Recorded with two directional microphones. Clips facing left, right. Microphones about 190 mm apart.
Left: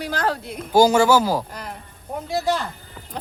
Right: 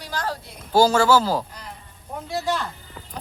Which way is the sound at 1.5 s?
90° left.